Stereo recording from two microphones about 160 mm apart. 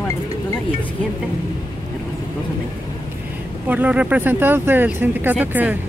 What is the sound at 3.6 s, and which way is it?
Speech, 10° right (ahead or behind).